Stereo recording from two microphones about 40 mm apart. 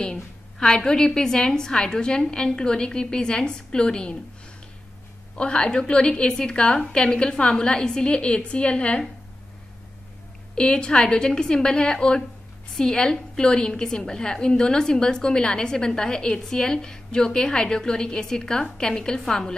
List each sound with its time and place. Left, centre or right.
0.0 s a woman's voice: left
5.4 s a woman's voice: left
10.5 s a woman's voice: left